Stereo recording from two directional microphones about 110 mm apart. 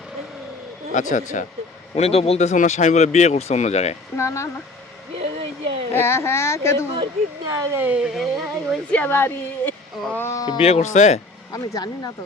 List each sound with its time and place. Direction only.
0.9 s speech: 90° left
2.0 s speech: 65° left (ahead or behind); by 3.9 s 85° left
4.2 s speech: 25° left (ahead or behind)
5.2 s speech: 55° right (ahead or behind)
5.9 s speech: 20° left (ahead or behind)
7.0 s speech: 35° right (ahead or behind)
7.8 s speech: 10° right (ahead or behind)
8.9 s a woman's voice: 15° left (ahead or behind)
10.6 s speech: 80° left
11.5 s speech: 30° left (ahead or behind)